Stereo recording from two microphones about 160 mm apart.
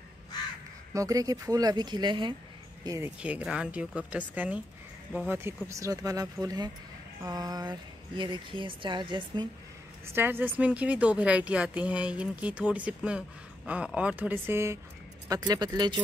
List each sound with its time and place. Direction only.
0.9 s speech: 20° right (ahead or behind)
3.2 s speech: 5° right (ahead or behind)
5.7 s speech: 20° right (ahead or behind)
10.0 s speech: 15° right (ahead or behind)